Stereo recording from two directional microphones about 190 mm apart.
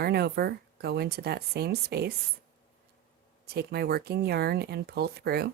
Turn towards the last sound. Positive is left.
turn(degrees=-55)  # may be behind; listen again after turning